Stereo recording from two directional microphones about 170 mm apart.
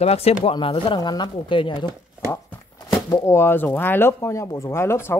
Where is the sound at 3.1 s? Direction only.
15° left (ahead or behind).